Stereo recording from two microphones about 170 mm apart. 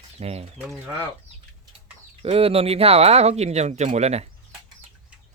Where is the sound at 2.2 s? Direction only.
35° right (ahead or behind).